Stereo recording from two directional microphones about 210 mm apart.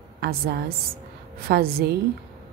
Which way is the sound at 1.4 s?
45° right (ahead or behind).